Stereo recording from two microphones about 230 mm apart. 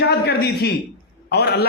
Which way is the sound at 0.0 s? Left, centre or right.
Left.